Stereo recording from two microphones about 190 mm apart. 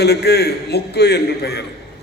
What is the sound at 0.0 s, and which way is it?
A man's voice, 60° left (ahead or behind).